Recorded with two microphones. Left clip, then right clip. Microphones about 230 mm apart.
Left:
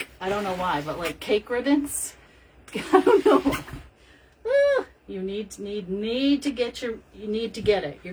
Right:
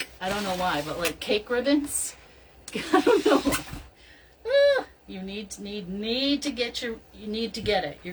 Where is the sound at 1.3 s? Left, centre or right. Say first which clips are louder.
Left 2 dB; centre.